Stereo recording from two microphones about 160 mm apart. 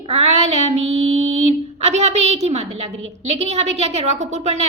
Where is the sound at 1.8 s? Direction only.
45° right (ahead or behind).